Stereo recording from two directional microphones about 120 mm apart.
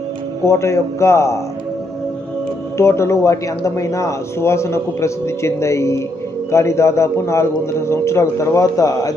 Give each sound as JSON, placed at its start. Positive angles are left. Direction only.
{"t": 0.4, "sound": "speech", "side_deg": 25}
{"t": 2.8, "sound": "speech", "side_deg": 20}